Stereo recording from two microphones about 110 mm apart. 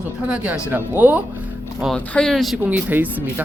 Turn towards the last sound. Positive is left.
turn(degrees=-15)  # may be behind; listen again after turning